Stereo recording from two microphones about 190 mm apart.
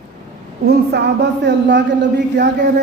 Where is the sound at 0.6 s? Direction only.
60° right (ahead or behind).